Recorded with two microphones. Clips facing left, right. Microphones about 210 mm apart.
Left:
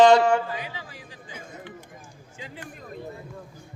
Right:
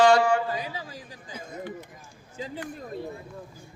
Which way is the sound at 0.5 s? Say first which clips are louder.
Right 2 dB; 40° right (ahead or behind).